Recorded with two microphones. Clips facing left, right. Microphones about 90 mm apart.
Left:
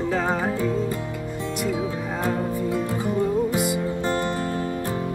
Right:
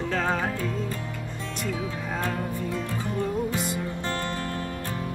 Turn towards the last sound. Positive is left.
turn(degrees=10)  # may be behind; listen again after turning